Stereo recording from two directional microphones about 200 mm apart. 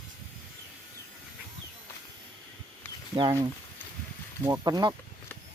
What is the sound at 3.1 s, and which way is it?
Speech, 20° right (ahead or behind).